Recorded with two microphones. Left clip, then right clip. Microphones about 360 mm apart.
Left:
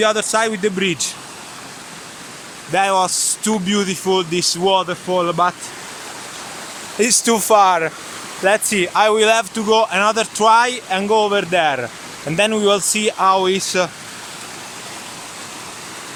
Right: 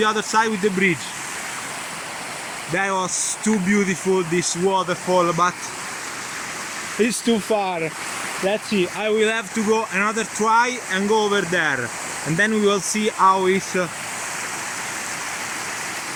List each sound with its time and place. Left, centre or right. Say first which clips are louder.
0.0 s speech: left 3 dB; centre
2.7 s speech: left 7 dB; centre
7.0 s speech: left 5 dB; centre
7.3 s speech: left 9 dB; left
9.0 s speech: left 6 dB; centre